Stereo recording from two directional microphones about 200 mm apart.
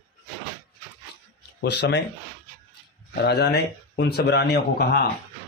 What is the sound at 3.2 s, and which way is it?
Speech, 55° left (ahead or behind).